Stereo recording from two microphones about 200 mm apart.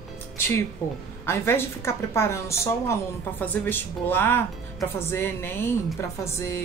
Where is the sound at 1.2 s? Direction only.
10° left (ahead or behind).